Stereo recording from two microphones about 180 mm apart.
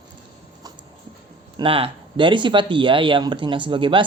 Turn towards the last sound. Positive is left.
turn(degrees=-30)  # may be behind; listen again after turning